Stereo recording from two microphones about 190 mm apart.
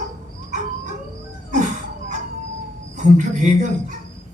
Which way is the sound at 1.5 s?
40° right (ahead or behind).